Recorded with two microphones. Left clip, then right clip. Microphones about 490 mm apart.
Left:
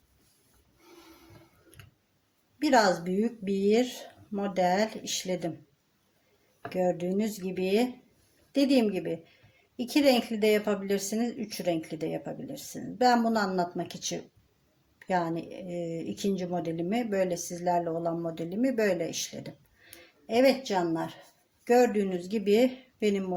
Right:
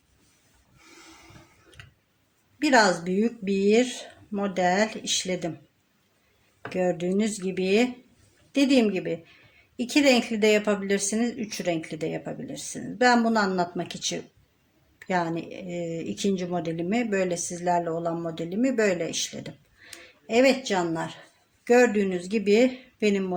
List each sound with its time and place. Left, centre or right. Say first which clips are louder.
1.8 s tick-tock: right 7 dB; left
2.6 s speech: right 3 dB; left
6.7 s speech: right 2 dB; left